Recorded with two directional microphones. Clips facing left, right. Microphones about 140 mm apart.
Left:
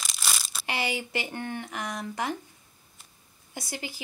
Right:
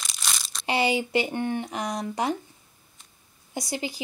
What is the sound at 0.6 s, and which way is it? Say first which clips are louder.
Speech: right 7 dB; 20° right (ahead or behind).